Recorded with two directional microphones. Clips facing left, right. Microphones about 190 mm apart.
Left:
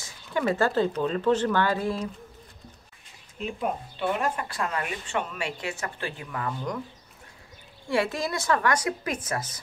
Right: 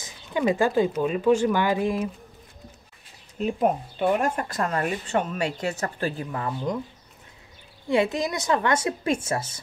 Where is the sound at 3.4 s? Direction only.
45° right (ahead or behind); by 6.8 s 25° right (ahead or behind).